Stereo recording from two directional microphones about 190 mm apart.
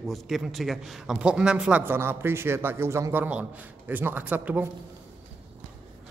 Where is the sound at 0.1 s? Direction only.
Centre (ahead or behind).